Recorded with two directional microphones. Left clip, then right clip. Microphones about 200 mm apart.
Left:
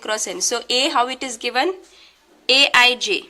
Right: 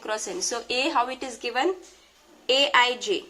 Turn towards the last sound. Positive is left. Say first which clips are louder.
# left 6 dB
turn(degrees=30)  # may be behind; listen again after turning